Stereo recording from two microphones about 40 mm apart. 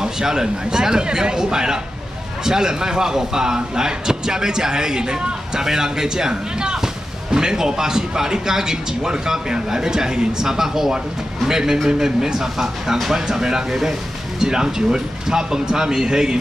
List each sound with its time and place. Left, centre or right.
0.0 s speech: centre